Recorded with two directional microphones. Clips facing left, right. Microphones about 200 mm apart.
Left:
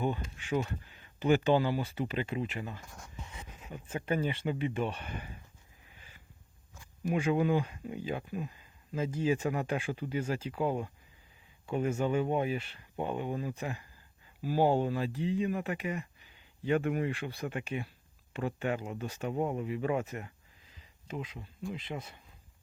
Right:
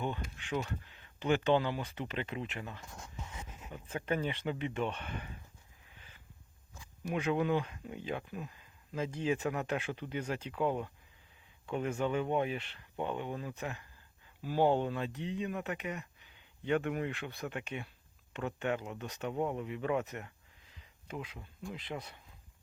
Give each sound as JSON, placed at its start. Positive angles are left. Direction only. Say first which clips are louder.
{"t": 0.5, "sound": "speech", "louder": "left 4 dB", "side_deg": 10}
{"t": 7.1, "sound": "speech", "louder": "left 3 dB", "side_deg": 10}